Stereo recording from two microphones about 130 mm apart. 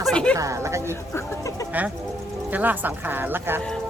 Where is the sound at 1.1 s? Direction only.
25° left (ahead or behind).